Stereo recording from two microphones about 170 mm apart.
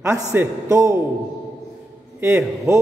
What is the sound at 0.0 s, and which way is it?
Speech, 10° right (ahead or behind).